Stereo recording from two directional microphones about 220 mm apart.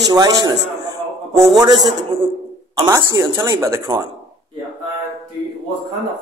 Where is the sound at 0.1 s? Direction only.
20° right (ahead or behind).